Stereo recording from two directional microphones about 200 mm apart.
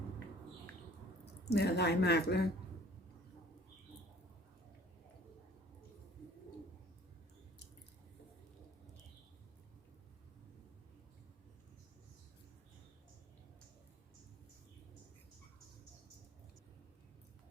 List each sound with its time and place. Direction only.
1.2 s speech: 55° left (ahead or behind)